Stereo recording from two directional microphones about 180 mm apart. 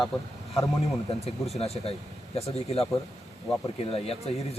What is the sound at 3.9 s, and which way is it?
Speech, 35° left (ahead or behind).